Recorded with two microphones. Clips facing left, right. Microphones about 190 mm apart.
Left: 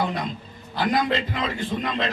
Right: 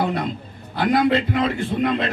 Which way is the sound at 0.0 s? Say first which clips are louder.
Right 4 dB; 60° right (ahead or behind).